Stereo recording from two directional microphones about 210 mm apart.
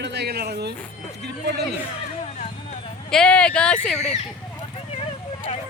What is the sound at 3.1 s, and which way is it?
Speech, 5° left (ahead or behind).